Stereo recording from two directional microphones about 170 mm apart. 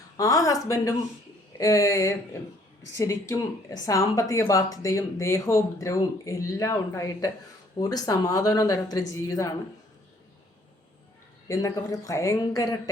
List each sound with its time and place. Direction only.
0.2 s speech: 20° left (ahead or behind)
11.4 s speech: 20° left (ahead or behind)